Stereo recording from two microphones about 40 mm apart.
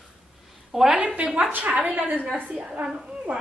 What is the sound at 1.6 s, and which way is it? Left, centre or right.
Speech, right.